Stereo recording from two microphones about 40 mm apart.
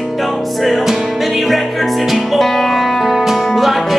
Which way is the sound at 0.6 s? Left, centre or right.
Centre.